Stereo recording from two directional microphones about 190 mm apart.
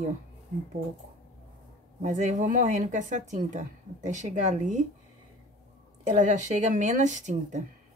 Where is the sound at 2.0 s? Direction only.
40° right (ahead or behind).